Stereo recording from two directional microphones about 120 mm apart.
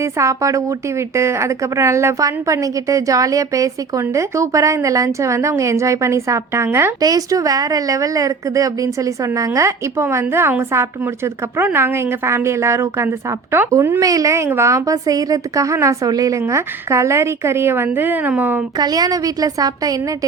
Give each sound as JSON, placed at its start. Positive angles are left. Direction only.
{"t": 0.0, "sound": "a woman's voice", "side_deg": -25}
{"t": 18.8, "sound": "a woman's voice", "side_deg": -35}